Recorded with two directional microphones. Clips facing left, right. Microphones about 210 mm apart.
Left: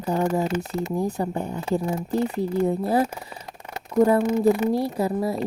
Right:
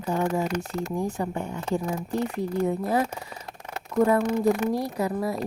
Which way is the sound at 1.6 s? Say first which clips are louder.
Left 3 dB; 5° left (ahead or behind).